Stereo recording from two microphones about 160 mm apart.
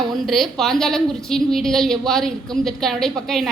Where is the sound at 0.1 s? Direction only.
Centre (ahead or behind).